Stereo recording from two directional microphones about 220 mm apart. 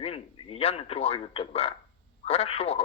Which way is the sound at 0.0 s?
25° left (ahead or behind).